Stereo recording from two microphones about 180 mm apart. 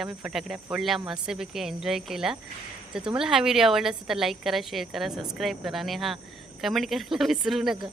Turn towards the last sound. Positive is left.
turn(degrees=0)  # may be behind; listen again after turning